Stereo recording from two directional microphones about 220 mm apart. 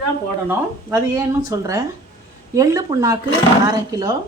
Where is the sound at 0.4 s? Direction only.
10° right (ahead or behind).